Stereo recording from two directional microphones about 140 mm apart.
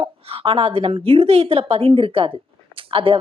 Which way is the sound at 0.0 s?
45° right (ahead or behind).